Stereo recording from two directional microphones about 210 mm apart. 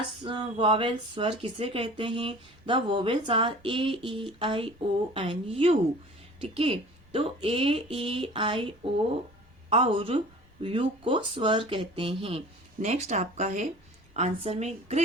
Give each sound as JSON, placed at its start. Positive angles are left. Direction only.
{"t": 0.2, "sound": "a woman's voice", "side_deg": -20}